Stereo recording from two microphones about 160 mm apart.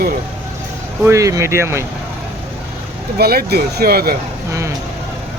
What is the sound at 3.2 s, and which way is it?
Speech, 75° right (ahead or behind).